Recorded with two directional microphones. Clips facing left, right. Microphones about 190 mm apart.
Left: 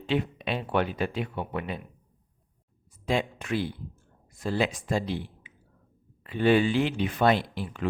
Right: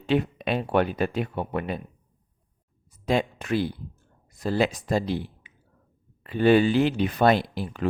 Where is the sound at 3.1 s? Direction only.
40° right (ahead or behind).